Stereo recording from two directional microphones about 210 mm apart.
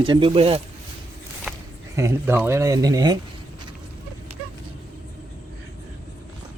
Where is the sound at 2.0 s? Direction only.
10° right (ahead or behind).